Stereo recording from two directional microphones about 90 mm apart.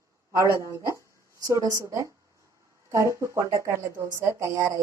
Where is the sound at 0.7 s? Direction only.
35° right (ahead or behind).